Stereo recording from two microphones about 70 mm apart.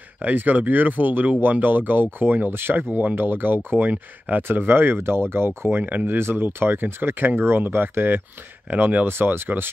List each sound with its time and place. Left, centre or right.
0.2 s speech: right